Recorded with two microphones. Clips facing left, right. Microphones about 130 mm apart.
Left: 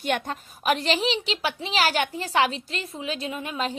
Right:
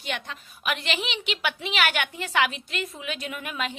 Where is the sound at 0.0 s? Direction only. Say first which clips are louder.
Left 7 dB; 45° left (ahead or behind).